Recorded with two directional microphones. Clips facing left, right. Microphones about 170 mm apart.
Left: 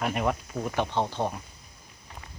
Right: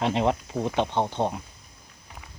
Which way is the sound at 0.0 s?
25° right (ahead or behind).